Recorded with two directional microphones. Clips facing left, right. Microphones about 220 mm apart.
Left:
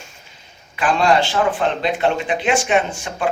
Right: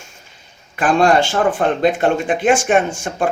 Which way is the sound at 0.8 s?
50° right (ahead or behind).